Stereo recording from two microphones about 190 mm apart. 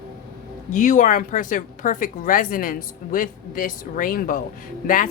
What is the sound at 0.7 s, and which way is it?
A woman's voice, 45° left (ahead or behind).